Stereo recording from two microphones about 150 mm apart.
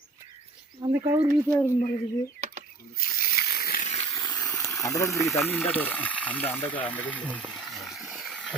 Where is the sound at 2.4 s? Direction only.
50° right (ahead or behind).